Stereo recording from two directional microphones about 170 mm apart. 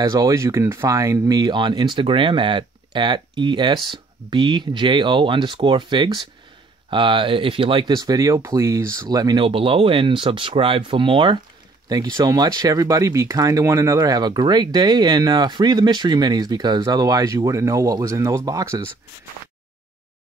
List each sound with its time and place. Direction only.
0.0 s speech: 20° right (ahead or behind)